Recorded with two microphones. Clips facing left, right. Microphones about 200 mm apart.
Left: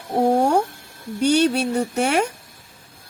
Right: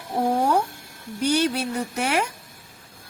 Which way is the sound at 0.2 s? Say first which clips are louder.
Left 4 dB; 30° left (ahead or behind).